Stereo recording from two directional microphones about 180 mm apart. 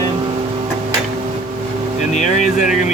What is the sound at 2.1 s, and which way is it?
Speech, 40° left (ahead or behind).